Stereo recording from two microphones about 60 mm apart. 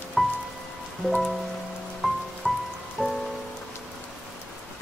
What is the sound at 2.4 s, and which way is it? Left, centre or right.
Rain on surface, centre.